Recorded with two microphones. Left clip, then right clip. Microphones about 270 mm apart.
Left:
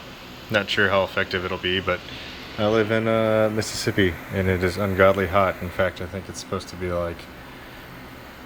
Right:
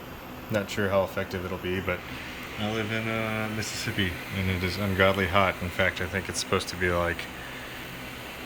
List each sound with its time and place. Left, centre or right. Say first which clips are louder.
0.5 s speech: left 6 dB; centre
2.6 s speech: left 10 dB; centre
4.6 s speech: left 5 dB; centre